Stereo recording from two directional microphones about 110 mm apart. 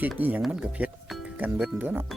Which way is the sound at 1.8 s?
15° right (ahead or behind).